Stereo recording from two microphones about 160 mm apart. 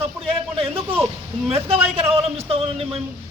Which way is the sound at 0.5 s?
35° right (ahead or behind).